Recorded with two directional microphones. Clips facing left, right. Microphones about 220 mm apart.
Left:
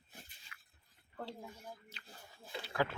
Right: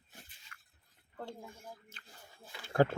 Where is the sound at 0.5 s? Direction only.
45° right (ahead or behind).